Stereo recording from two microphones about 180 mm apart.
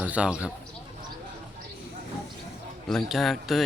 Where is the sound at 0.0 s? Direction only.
5° right (ahead or behind).